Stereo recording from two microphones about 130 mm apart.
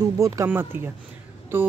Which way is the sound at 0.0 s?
25° right (ahead or behind).